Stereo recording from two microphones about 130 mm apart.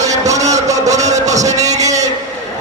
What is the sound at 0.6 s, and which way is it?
Vehicle, 60° right (ahead or behind).